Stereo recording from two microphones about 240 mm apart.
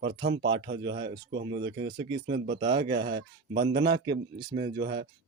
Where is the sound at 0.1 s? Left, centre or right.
Right.